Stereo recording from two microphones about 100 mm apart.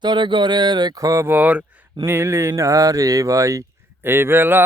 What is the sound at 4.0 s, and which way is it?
Speech, 25° right (ahead or behind).